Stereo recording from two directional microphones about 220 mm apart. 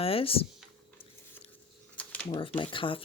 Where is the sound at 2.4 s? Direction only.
25° left (ahead or behind).